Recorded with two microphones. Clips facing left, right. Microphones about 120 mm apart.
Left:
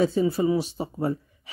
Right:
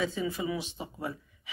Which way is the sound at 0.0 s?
40° left (ahead or behind).